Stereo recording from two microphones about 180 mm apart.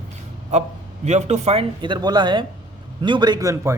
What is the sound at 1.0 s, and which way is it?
A man's voice, 40° right (ahead or behind).